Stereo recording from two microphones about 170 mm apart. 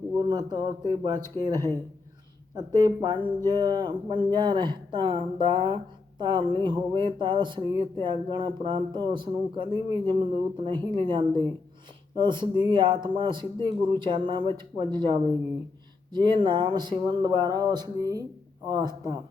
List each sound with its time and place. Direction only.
0.2 s speech: 25° right (ahead or behind)